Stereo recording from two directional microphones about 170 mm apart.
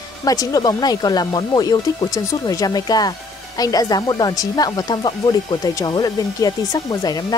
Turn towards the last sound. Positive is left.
turn(degrees=20)  # may be behind; listen again after turning